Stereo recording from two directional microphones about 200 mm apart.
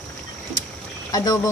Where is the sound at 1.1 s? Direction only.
20° left (ahead or behind).